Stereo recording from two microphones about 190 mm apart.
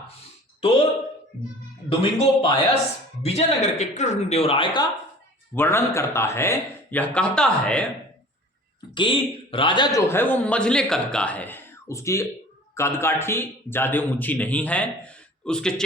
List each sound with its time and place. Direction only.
1.9 s a man's voice: 30° left (ahead or behind)
5.5 s a man's voice: 15° left (ahead or behind)
9.0 s a man's voice: 25° left (ahead or behind); by 15.7 s 5° left (ahead or behind)